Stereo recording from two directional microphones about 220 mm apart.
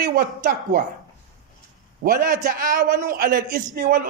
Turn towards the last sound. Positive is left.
turn(degrees=-45)  # may be behind; listen again after turning